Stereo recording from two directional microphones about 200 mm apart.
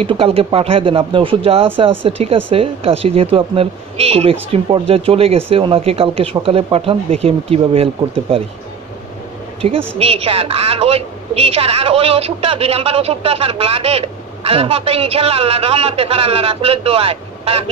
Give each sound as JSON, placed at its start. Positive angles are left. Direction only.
{"t": 0.0, "sound": "a woman's voice", "side_deg": -30}
{"t": 9.6, "sound": "a woman's voice", "side_deg": -30}